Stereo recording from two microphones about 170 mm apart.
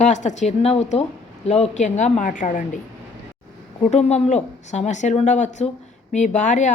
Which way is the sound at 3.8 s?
40° left (ahead or behind).